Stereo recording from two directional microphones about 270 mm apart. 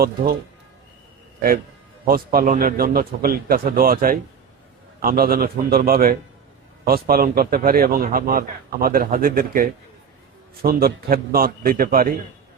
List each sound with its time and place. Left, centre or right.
2.0 s a man's voice: right